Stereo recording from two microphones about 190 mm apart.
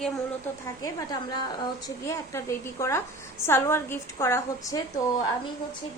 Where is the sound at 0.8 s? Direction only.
20° left (ahead or behind).